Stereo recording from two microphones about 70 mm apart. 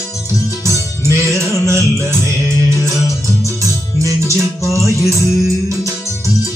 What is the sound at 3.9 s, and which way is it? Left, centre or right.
Music, right.